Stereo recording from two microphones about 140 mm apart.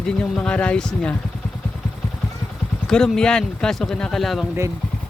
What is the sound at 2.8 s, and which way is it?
Speech, 5° left (ahead or behind).